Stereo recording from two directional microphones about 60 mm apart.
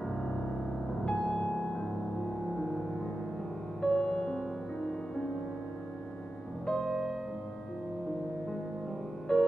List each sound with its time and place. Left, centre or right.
1.0 s music: centre
3.8 s music: centre
6.6 s music: centre
9.3 s music: centre